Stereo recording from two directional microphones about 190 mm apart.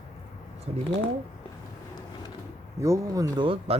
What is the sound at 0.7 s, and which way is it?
Speech, 30° right (ahead or behind).